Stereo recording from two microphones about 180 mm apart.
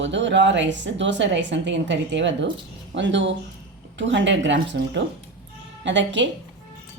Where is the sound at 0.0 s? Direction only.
90° right.